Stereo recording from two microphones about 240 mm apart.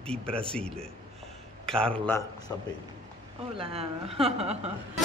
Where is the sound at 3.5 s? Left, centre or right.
Right.